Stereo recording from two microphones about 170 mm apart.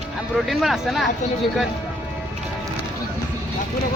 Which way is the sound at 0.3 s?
Centre (ahead or behind).